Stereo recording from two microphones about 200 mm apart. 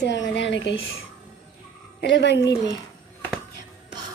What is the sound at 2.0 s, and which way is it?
Speech, 60° left (ahead or behind).